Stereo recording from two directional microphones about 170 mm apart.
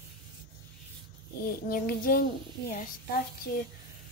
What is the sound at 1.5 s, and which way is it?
Child singing, 60° left (ahead or behind).